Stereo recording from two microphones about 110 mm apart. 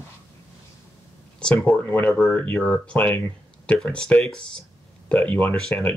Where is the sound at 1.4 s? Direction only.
10° left (ahead or behind).